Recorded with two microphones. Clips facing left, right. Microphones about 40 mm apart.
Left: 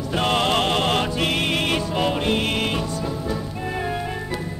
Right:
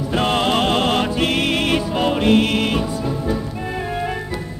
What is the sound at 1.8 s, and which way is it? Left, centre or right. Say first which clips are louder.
Music: right 3 dB; centre.